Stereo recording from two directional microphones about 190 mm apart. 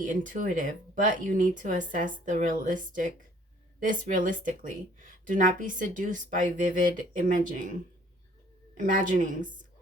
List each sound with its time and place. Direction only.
0.0 s speech: 45° right (ahead or behind)
8.8 s speech: 45° right (ahead or behind)